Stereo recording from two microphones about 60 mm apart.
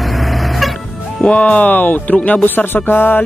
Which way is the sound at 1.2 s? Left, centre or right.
Left.